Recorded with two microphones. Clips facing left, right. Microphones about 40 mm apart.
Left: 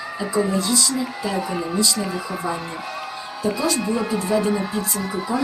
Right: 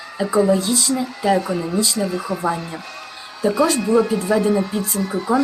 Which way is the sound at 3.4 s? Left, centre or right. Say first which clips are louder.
Right 6 dB; centre.